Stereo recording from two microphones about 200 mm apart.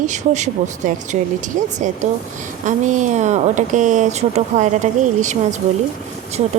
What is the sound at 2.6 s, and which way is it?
Speech, 40° right (ahead or behind).